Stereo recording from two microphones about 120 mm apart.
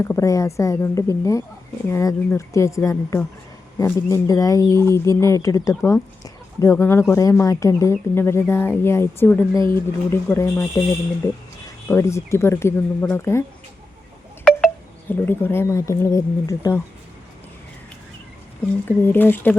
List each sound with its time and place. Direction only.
0.0 s speech: 25° left (ahead or behind)
11.9 s speech: 25° left (ahead or behind)
15.1 s speech: 20° left (ahead or behind)
18.9 s speech: 15° left (ahead or behind)